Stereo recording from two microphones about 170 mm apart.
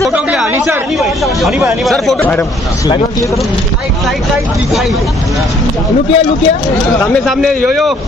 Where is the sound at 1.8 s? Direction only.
Centre (ahead or behind).